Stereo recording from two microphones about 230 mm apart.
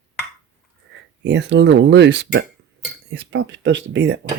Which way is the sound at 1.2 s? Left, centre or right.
Right.